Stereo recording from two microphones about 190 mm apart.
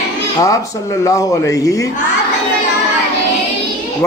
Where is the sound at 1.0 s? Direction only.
15° left (ahead or behind).